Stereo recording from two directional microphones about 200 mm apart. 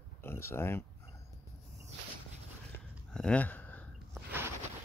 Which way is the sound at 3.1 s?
5° left (ahead or behind).